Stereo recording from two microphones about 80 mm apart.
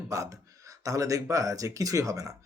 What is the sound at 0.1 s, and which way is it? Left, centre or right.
Speech, right.